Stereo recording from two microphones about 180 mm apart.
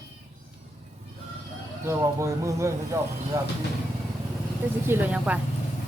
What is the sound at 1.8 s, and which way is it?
Speech, 15° right (ahead or behind).